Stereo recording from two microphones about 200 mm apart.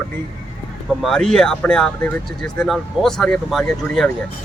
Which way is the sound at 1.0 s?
Centre (ahead or behind).